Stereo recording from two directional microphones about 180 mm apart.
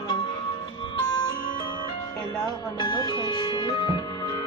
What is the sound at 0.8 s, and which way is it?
Music, 30° left (ahead or behind).